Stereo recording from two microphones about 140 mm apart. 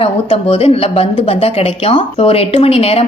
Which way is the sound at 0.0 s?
45° left (ahead or behind).